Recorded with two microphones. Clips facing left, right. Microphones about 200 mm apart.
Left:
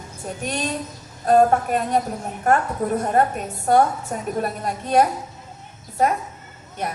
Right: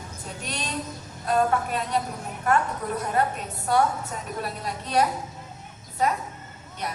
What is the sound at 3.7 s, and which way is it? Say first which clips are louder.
A woman's voice: left 5 dB; 50° left (ahead or behind).